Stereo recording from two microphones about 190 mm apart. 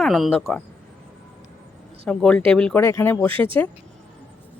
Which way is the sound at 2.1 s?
5° left (ahead or behind).